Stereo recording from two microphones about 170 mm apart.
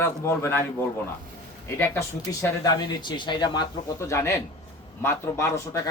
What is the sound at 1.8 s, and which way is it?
A man's voice, 15° left (ahead or behind).